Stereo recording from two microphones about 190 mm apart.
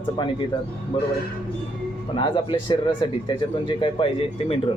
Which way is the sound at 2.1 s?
25° left (ahead or behind).